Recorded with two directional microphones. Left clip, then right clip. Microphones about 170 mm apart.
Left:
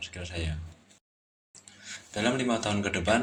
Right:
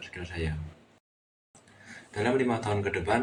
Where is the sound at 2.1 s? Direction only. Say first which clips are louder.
Right 1 dB; 45° left (ahead or behind).